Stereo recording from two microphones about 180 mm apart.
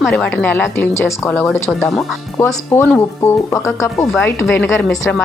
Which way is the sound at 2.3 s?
15° left (ahead or behind).